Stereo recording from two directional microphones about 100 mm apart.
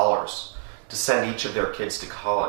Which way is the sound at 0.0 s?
20° right (ahead or behind).